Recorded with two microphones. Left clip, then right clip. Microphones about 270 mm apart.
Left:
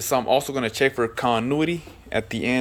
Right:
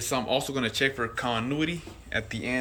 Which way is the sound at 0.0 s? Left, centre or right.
Centre.